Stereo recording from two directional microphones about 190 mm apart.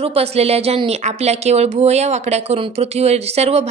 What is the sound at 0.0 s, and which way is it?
Speech, 30° right (ahead or behind).